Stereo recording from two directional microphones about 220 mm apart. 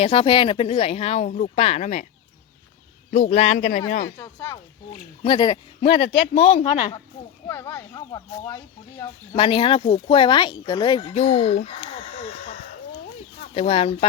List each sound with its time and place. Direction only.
0.0 s speech: 25° left (ahead or behind)
3.1 s a man's voice: 35° left (ahead or behind)
4.2 s speech: 15° left (ahead or behind)
13.5 s speech: 25° left (ahead or behind)